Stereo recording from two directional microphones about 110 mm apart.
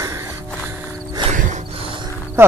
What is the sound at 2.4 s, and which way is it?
Speech, 20° right (ahead or behind).